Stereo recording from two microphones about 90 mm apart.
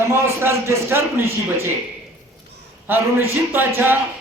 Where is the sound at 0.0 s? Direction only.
30° right (ahead or behind).